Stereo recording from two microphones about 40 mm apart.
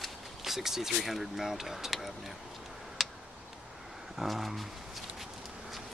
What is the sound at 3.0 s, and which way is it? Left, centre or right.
Tick, centre.